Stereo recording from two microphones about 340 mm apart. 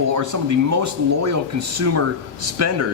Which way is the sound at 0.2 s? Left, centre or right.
Right.